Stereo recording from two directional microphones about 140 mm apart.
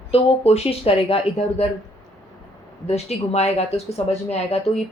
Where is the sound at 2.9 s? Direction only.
50° left (ahead or behind).